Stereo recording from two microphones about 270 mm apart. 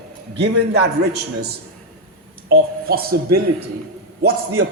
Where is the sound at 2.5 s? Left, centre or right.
Right.